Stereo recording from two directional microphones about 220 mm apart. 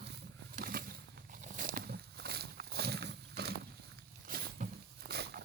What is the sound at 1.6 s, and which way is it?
Wild animals, 40° right (ahead or behind).